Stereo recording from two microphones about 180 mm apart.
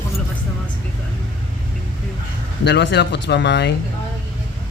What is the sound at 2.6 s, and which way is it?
Speech, 70° left (ahead or behind).